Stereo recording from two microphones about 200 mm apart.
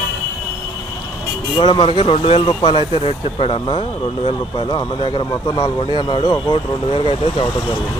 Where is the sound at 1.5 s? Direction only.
25° left (ahead or behind).